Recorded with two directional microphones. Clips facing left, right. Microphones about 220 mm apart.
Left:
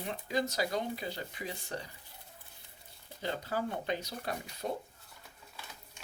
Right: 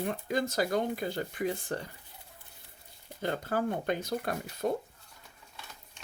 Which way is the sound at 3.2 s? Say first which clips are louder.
Right 4 dB; 50° right (ahead or behind).